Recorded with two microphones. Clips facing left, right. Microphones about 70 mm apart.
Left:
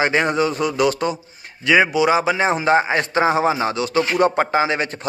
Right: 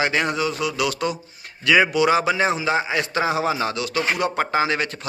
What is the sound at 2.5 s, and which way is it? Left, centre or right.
A man's voice, left.